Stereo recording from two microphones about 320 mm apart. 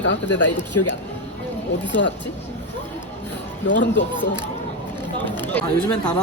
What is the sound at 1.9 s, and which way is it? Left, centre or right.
Speech, left.